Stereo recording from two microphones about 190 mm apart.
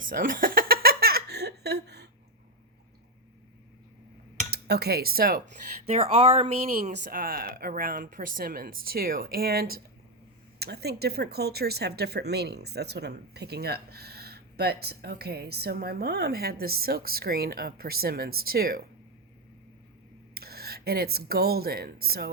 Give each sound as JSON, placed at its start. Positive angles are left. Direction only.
{"t": 0.0, "sound": "a sound", "side_deg": -45}
{"t": 4.5, "sound": "speech", "side_deg": -60}
{"t": 5.8, "sound": "speech", "side_deg": -30}
{"t": 7.1, "sound": "speech", "side_deg": -50}
{"t": 20.3, "sound": "speech", "side_deg": -55}